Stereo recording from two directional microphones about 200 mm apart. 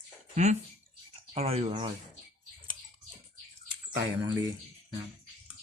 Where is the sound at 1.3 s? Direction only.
30° right (ahead or behind).